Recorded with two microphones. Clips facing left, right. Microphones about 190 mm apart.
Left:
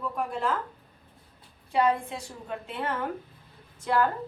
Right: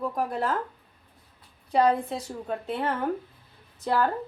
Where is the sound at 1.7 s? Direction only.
35° right (ahead or behind).